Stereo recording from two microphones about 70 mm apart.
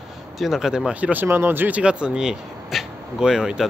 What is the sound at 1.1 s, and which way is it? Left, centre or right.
Speech, right.